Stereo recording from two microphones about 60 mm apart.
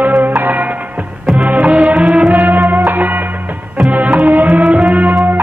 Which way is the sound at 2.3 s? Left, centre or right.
Right.